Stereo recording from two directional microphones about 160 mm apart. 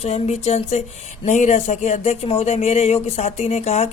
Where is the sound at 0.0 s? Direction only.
40° left (ahead or behind).